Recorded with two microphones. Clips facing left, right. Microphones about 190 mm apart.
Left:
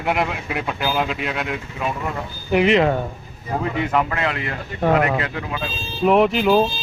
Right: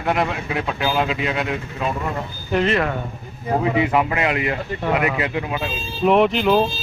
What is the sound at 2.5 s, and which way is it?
Speech, 15° left (ahead or behind).